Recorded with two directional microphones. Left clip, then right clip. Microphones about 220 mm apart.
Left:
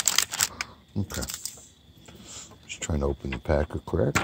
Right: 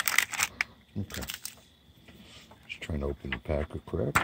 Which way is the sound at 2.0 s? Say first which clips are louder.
Left 7 dB; 15° left (ahead or behind).